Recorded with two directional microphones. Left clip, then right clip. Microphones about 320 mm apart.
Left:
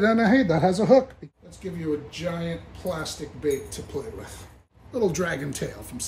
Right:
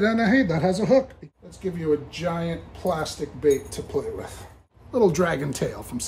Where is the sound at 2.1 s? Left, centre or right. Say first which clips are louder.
Right 3 dB; centre.